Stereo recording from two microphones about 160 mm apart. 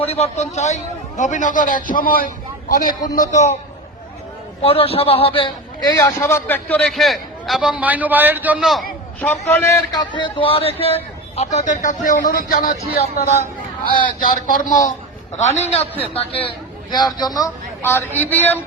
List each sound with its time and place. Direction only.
0.1 s a man's voice: 45° left (ahead or behind); by 3.1 s 60° left (ahead or behind)
3.3 s a man's voice: 45° left (ahead or behind)
4.6 s a man's voice: 35° left (ahead or behind); by 8.5 s 10° right (ahead or behind)
9.2 s a man's voice: 10° left (ahead or behind)
10.0 s a man's voice: 30° left (ahead or behind); by 12.1 s 55° left (ahead or behind)
12.2 s a man's voice: 65° left (ahead or behind); by 18.6 s 10° left (ahead or behind)